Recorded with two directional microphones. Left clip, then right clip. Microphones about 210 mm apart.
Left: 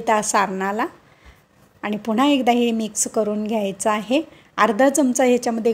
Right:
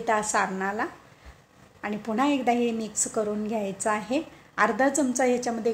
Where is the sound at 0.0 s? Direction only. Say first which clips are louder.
Left 6 dB; 35° left (ahead or behind).